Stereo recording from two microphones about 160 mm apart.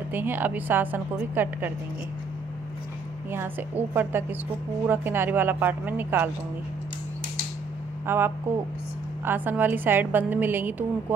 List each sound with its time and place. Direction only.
0.1 s a woman's voice: 10° right (ahead or behind)
3.3 s a woman's voice: 15° right (ahead or behind)
8.1 s a woman's voice: 15° right (ahead or behind)